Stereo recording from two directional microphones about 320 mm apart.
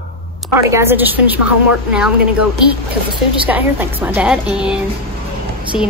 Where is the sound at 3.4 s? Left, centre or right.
Centre.